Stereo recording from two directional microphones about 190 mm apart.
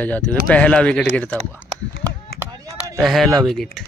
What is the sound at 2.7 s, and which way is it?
Speech, 5° right (ahead or behind).